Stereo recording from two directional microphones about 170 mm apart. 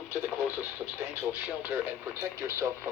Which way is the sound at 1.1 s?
10° right (ahead or behind).